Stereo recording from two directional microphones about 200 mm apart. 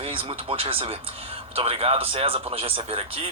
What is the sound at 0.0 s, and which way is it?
Speech, 25° right (ahead or behind).